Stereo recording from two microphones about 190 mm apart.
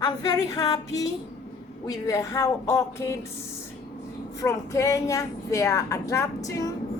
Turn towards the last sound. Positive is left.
turn(degrees=20)  # may be behind; listen again after turning